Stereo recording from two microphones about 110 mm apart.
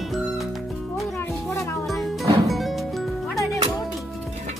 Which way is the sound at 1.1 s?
25° left (ahead or behind).